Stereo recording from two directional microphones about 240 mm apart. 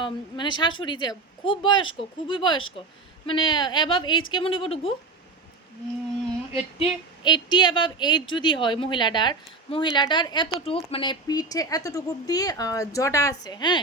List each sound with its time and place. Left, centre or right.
0.0 s speech: centre
6.5 s speech: left